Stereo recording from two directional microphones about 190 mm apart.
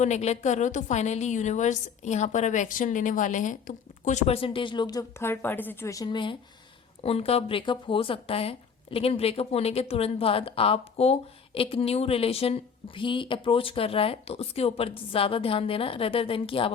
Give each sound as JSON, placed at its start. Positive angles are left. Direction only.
{"t": 0.0, "sound": "a woman's voice", "side_deg": 35}